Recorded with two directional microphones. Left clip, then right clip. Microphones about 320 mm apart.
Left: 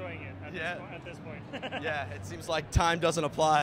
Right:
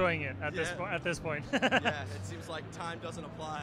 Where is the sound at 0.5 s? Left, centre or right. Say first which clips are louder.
Left 5 dB; right.